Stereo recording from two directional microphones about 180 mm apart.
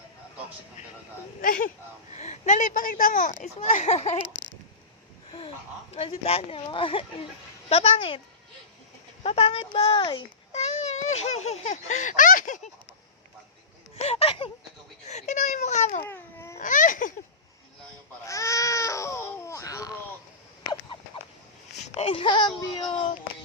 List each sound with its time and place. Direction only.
1.4 s speech: 50° left (ahead or behind)
2.1 s speech: 40° left (ahead or behind)
5.3 s speech: 30° left (ahead or behind)
9.2 s speech: 35° left (ahead or behind)
10.5 s speech: 40° left (ahead or behind)
13.9 s a sound: 35° left (ahead or behind)
16.0 s babbling: 15° left (ahead or behind)
16.6 s baby cry: 45° left (ahead or behind)
18.3 s baby cry: 15° left (ahead or behind)
21.7 s speech: 40° left (ahead or behind)